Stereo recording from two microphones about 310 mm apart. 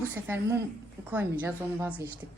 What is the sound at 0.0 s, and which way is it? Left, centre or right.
A woman's voice, centre.